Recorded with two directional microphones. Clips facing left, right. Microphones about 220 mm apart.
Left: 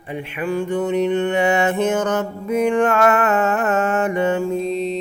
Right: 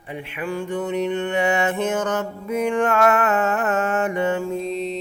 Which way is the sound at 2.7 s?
65° left (ahead or behind).